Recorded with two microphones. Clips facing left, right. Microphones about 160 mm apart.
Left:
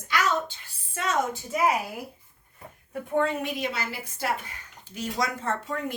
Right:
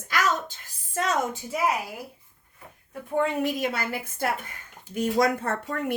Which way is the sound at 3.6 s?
50° right (ahead or behind).